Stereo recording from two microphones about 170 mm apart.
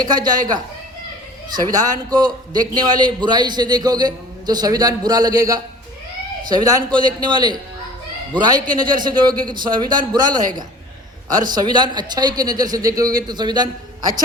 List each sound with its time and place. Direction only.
0.0 s a man's voice: 25° right (ahead or behind)